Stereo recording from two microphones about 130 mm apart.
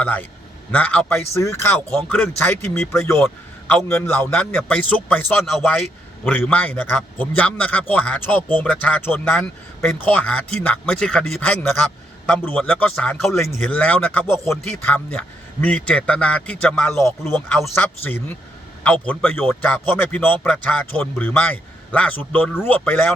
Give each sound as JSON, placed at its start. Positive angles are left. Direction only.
{"t": 0.0, "sound": "a man's voice", "side_deg": 15}
{"t": 1.2, "sound": "speech", "side_deg": 20}
{"t": 3.2, "sound": "a man's voice", "side_deg": 5}
{"t": 17.0, "sound": "a man's voice", "side_deg": 20}